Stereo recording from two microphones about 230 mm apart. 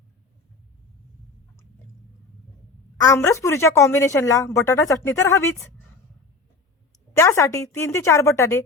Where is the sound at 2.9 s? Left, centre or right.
Centre.